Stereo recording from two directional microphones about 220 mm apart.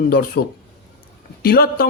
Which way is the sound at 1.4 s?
45° left (ahead or behind).